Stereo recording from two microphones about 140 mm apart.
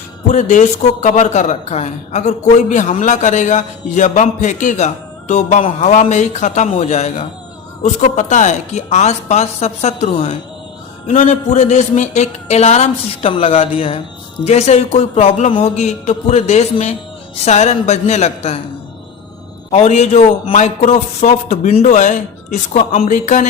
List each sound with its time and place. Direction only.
0.3 s a man's voice: 60° left (ahead or behind); by 10.3 s 45° left (ahead or behind)
11.1 s a man's voice: 60° left (ahead or behind)
19.7 s a man's voice: 50° left (ahead or behind)
23.1 s a man's voice: 60° left (ahead or behind)